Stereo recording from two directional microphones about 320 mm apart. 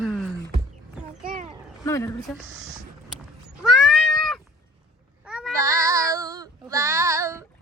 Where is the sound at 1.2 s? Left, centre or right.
Right.